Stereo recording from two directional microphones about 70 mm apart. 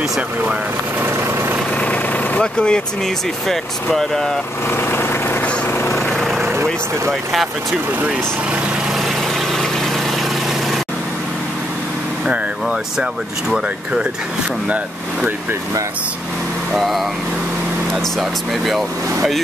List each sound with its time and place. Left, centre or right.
1.8 s vehicle: centre
2.4 s speech: centre
4.6 s vehicle: left
6.0 s vehicle: centre
6.4 s vehicle: right
16.7 s speech: centre